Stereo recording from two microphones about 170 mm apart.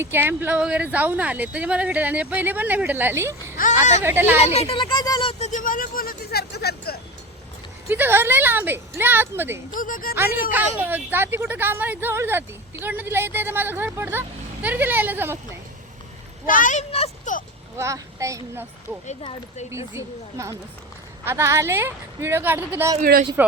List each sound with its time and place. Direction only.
0.0 s speech: 15° right (ahead or behind)
3.5 s a sound: 50° left (ahead or behind)
4.0 s speech: 10° right (ahead or behind)
4.4 s speech: 40° left (ahead or behind)
5.5 s vehicle: 50° left (ahead or behind); by 7.0 s 70° left (ahead or behind)
7.9 s speech: 15° right (ahead or behind)
9.7 s speech: 55° left (ahead or behind)
10.5 s speech: 10° right (ahead or behind)
16.5 s speech: 50° left (ahead or behind)
16.9 s speech: 35° left (ahead or behind)
17.7 s a child's voice: 20° right (ahead or behind)
19.2 s speech: 35° left (ahead or behind)
19.7 s speech: 15° right (ahead or behind)